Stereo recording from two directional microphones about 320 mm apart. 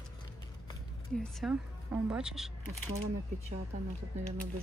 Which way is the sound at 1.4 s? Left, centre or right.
Centre.